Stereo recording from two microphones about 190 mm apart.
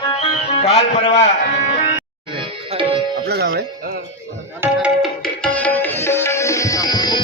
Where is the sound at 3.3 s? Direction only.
55° right (ahead or behind).